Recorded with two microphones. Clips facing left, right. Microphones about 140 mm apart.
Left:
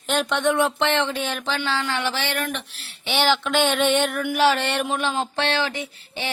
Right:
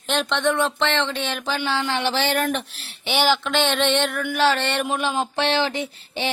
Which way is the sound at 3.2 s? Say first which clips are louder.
Left 1 dB; centre (ahead or behind).